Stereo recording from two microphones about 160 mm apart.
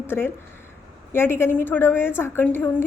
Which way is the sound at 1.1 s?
15° left (ahead or behind).